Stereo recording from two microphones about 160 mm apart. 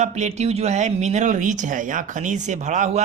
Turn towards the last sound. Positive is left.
turn(degrees=-50)  # may be behind; listen again after turning